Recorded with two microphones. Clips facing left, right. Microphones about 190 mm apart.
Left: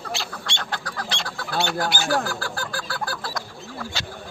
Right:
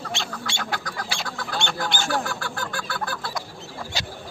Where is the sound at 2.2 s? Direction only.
35° left (ahead or behind).